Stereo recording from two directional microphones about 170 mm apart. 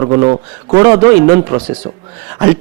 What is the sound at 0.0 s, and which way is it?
Speech, 20° right (ahead or behind).